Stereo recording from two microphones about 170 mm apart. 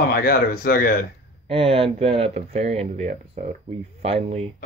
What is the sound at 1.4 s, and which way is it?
Speech, 35° right (ahead or behind).